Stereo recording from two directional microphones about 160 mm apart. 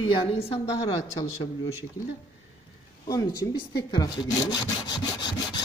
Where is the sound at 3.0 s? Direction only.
25° left (ahead or behind).